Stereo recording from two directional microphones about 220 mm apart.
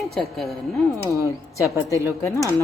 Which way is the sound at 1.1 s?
15° left (ahead or behind).